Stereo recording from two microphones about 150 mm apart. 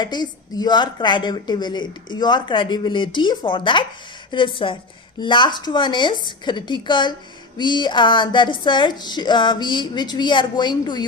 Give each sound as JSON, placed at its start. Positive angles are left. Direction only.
{"t": 0.0, "sound": "a woman's voice", "side_deg": 30}